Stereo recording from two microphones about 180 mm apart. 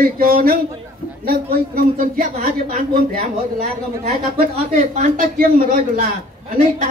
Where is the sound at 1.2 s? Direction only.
55° right (ahead or behind).